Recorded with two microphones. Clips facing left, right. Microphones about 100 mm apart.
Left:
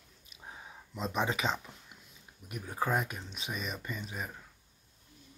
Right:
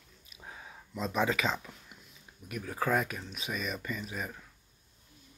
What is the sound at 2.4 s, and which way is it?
Speech, 25° left (ahead or behind).